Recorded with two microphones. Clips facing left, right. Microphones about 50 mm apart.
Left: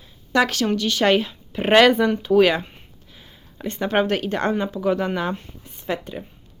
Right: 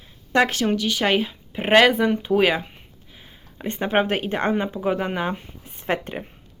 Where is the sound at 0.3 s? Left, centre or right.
Right.